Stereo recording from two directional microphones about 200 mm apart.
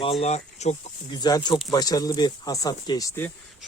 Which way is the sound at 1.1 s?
20° left (ahead or behind).